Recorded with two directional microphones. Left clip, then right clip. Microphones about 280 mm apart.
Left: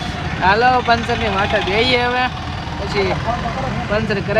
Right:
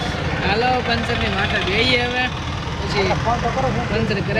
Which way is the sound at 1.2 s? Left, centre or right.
Centre.